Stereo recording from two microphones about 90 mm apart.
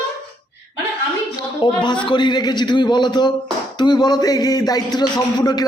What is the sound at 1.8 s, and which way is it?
Speech, 60° left (ahead or behind).